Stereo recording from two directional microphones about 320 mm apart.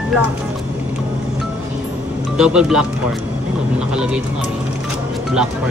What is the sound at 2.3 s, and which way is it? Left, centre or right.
Speech, centre.